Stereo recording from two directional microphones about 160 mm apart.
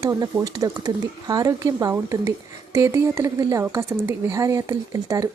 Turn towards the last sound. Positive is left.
turn(degrees=-20)  # may be behind; listen again after turning